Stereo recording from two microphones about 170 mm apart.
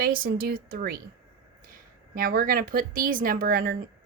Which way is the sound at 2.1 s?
55° right (ahead or behind).